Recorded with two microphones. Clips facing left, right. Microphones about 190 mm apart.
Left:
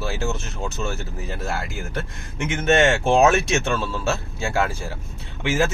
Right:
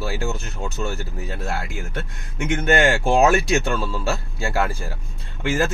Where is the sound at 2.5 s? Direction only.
Centre (ahead or behind).